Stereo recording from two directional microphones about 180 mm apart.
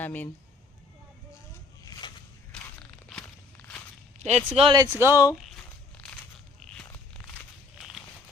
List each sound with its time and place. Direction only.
0.0 s speech: 10° left (ahead or behind)
1.8 s a sound: 25° left (ahead or behind)
3.1 s walk: 5° left (ahead or behind)
4.2 s speech: 40° right (ahead or behind)
4.5 s speech: 25° right (ahead or behind)
4.9 s speech: 15° right (ahead or behind)
5.3 s tearing: centre (ahead or behind)
6.6 s a sound: 5° left (ahead or behind)
7.8 s walk: centre (ahead or behind)